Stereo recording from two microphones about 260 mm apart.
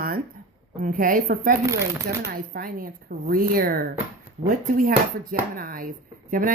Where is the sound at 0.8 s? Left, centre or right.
Right.